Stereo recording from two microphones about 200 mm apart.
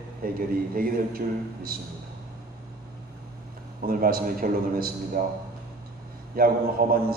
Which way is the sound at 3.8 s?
45° right (ahead or behind).